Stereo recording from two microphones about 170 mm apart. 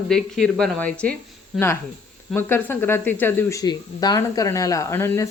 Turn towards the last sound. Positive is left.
turn(degrees=15)  # may be behind; listen again after turning